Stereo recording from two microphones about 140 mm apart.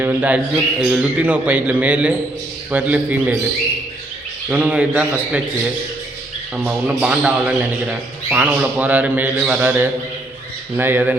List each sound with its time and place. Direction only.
0.0 s a man's voice: 15° right (ahead or behind)
4.4 s a man's voice: 10° right (ahead or behind)
6.7 s a man's voice: 10° right (ahead or behind)